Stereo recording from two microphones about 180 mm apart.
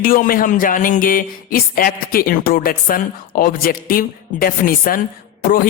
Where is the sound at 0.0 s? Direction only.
50° left (ahead or behind).